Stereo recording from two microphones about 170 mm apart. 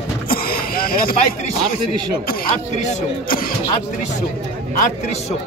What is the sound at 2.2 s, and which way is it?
A man's voice, 55° left (ahead or behind).